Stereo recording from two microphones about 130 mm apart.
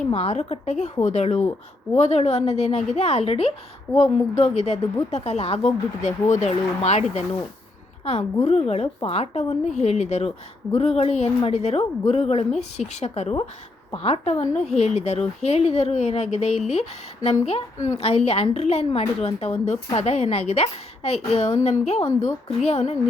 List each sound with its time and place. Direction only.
0.1 s a woman's voice: 55° left (ahead or behind)
8.4 s a woman's voice: 55° left (ahead or behind)